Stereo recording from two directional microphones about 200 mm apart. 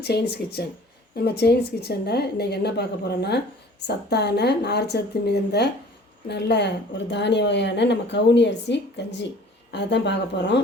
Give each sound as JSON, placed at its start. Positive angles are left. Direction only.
{"t": 0.0, "sound": "speech", "side_deg": 55}